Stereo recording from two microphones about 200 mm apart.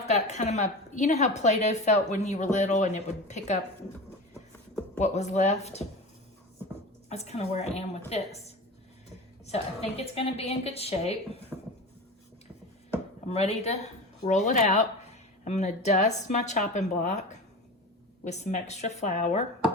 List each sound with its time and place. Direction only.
0.0 s a woman's voice: 35° left (ahead or behind)
4.9 s a woman's voice: 35° left (ahead or behind)
7.1 s a woman's voice: 30° left (ahead or behind)
13.2 s a woman's voice: 30° left (ahead or behind)
18.3 s a woman's voice: 35° left (ahead or behind)